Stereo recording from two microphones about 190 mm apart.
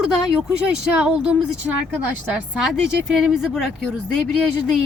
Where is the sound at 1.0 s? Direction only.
5° right (ahead or behind).